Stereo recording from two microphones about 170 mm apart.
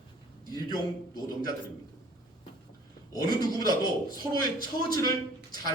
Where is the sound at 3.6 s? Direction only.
25° left (ahead or behind).